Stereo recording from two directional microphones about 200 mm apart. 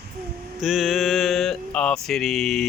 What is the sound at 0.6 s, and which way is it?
Mantra, centre (ahead or behind).